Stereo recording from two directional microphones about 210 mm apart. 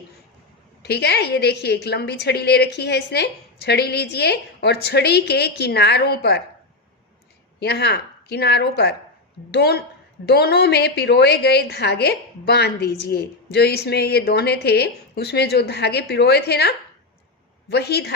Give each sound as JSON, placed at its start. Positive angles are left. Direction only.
{"t": 0.8, "sound": "a woman's voice", "side_deg": 50}
{"t": 7.6, "sound": "a woman's voice", "side_deg": 50}